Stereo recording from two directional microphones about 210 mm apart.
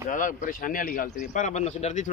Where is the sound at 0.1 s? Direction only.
40° left (ahead or behind).